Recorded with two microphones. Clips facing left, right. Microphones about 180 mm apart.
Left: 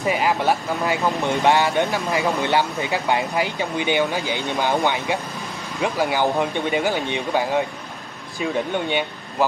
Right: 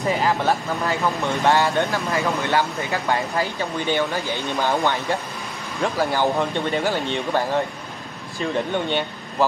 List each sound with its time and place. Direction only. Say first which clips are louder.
0.0 s speech: left 1 dB; 15° left (ahead or behind)